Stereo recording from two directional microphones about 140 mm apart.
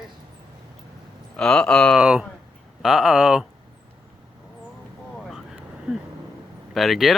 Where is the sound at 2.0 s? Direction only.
5° right (ahead or behind).